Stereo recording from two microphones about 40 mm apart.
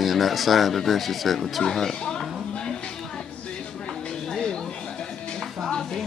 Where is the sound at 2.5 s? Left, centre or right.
Left.